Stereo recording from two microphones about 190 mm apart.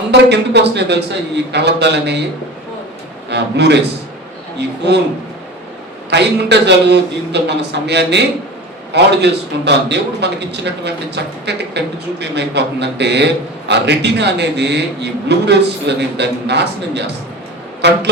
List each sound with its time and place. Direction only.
0.1 s a man's voice: 65° right (ahead or behind)
3.2 s a man's voice: 65° right (ahead or behind)
4.8 s a man's voice: 60° right (ahead or behind)
6.1 s a man's voice: 65° right (ahead or behind)